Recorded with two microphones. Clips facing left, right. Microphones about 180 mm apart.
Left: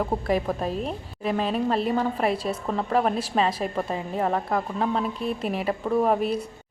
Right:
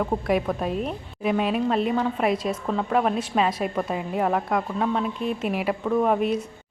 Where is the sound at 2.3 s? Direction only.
30° left (ahead or behind).